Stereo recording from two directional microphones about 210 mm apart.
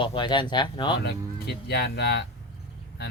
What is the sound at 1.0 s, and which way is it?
Speech, 50° left (ahead or behind).